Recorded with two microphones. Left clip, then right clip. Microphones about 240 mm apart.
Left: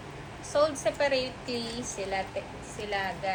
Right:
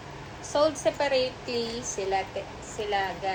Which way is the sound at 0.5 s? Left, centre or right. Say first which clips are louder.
Right 2 dB; right.